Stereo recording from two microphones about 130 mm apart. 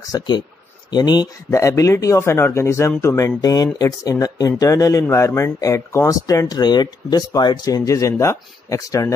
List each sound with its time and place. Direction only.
0.1 s speech: 30° left (ahead or behind)